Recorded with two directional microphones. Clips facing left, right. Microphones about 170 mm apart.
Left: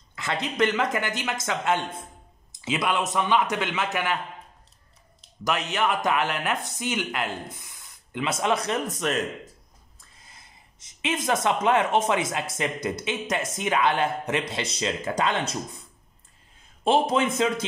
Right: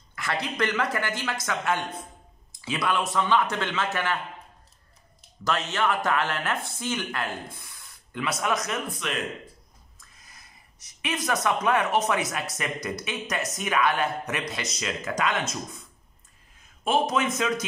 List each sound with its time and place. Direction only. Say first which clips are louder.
0.1 s speech: left 1 dB; 20° left (ahead or behind)
5.4 s speech: left 1 dB; 15° left (ahead or behind); by 9.2 s 45° left (ahead or behind)
9.9 s a sound: left 2 dB; 25° left (ahead or behind)
11.0 s speech: left 3 dB; 25° left (ahead or behind)
16.8 s speech: left 3 dB; 30° left (ahead or behind)